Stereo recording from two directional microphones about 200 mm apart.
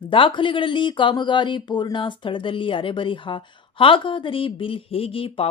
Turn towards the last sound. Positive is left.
turn(degrees=30)  # may be behind; listen again after turning